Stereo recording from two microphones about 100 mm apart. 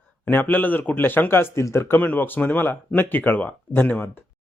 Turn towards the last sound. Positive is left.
turn(degrees=20)  # may be behind; listen again after turning